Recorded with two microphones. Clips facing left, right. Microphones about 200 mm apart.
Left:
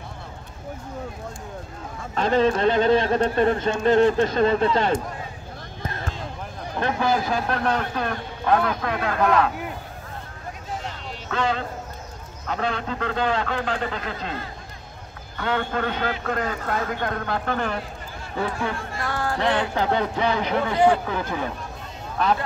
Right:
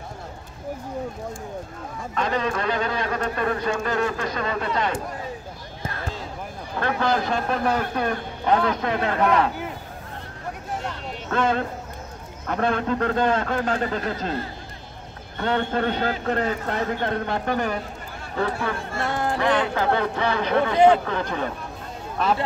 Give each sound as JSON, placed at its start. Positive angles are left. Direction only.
{"t": 2.1, "sound": "speech", "side_deg": 30}
{"t": 7.0, "sound": "a man's voice", "side_deg": 5}
{"t": 11.2, "sound": "a man's voice", "side_deg": -50}
{"t": 15.4, "sound": "a man's voice", "side_deg": -35}
{"t": 18.9, "sound": "a man's voice", "side_deg": -20}
{"t": 19.4, "sound": "speech", "side_deg": 20}